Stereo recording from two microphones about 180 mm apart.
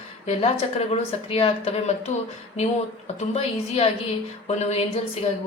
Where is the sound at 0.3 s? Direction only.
35° left (ahead or behind).